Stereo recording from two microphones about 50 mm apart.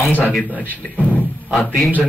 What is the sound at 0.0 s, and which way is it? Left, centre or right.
Speech, left.